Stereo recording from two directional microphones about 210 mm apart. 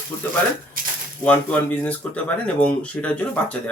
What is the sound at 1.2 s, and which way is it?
Speech, 10° left (ahead or behind).